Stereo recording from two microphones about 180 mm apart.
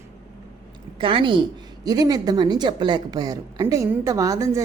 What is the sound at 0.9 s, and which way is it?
A woman's voice, 30° right (ahead or behind).